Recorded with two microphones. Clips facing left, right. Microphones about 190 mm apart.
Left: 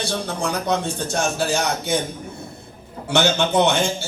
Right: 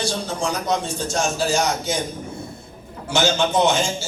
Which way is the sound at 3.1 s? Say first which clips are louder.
Left 1 dB; 60° left (ahead or behind).